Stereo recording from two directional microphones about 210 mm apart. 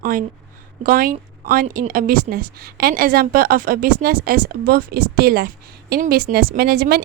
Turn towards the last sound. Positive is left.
turn(degrees=-50)  # may be behind; listen again after turning